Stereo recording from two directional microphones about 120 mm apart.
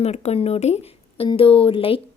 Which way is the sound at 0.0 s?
65° left (ahead or behind).